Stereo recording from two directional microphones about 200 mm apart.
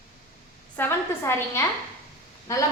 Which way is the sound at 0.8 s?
10° left (ahead or behind).